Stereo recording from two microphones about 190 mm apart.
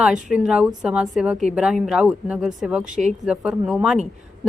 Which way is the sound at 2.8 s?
40° right (ahead or behind).